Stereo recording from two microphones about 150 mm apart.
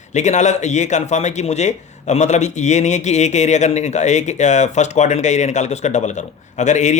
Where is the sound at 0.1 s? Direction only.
50° left (ahead or behind).